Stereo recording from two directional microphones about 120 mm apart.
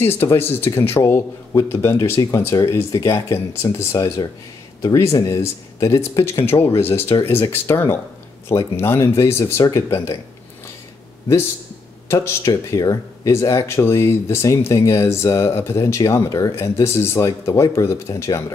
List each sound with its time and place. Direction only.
0.0 s speech: 20° left (ahead or behind)
12.1 s speech: 25° left (ahead or behind)